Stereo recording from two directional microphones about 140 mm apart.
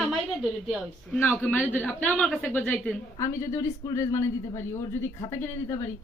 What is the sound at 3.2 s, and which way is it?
A woman's voice, 20° left (ahead or behind).